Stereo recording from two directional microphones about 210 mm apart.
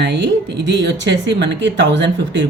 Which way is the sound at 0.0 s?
55° right (ahead or behind).